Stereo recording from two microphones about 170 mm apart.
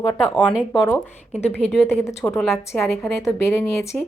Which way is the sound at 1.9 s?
15° left (ahead or behind).